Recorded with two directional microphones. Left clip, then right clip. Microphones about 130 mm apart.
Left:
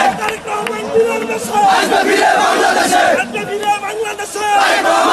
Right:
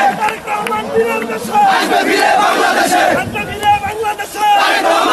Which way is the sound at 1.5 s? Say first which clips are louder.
Right 1 dB; 30° left (ahead or behind).